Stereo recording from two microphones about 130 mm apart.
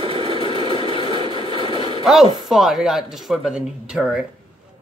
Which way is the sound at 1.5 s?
40° right (ahead or behind).